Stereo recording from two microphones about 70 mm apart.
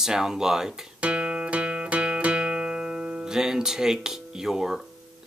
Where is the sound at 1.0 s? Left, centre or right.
Centre.